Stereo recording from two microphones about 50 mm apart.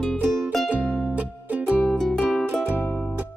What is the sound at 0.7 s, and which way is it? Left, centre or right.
Music, right.